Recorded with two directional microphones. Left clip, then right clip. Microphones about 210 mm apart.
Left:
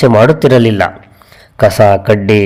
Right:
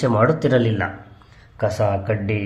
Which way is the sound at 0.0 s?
40° left (ahead or behind).